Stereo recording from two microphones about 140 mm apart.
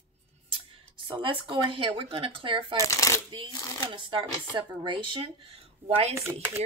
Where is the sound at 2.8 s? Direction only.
20° left (ahead or behind).